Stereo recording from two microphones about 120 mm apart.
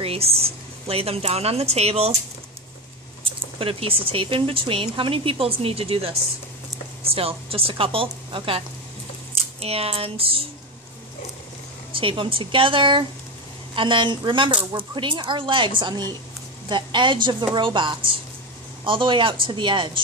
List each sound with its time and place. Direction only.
0.0 s speech: 55° right (ahead or behind)
3.5 s speech: 50° right (ahead or behind)
9.6 s speech: 55° right (ahead or behind)
11.9 s a woman's voice: 45° right (ahead or behind)